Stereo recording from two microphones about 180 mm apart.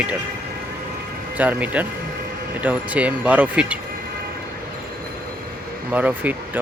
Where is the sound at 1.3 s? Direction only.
10° right (ahead or behind).